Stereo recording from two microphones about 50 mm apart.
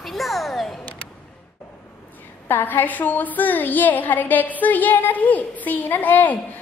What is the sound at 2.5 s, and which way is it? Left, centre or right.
A woman's voice, left.